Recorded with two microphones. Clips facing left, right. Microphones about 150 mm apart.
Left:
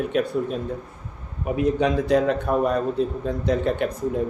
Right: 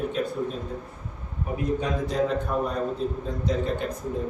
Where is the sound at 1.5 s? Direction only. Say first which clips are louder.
Left 6 dB; 80° left.